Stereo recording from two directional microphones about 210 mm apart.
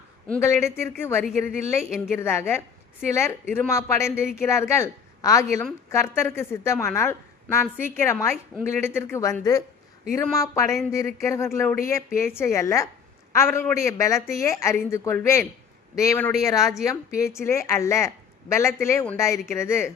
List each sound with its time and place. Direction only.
0.3 s a woman's voice: 15° left (ahead or behind)